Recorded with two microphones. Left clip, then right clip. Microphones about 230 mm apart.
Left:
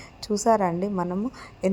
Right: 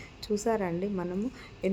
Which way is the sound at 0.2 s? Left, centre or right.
Centre.